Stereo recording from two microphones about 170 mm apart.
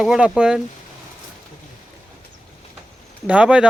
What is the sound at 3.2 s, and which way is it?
Speech, 5° right (ahead or behind).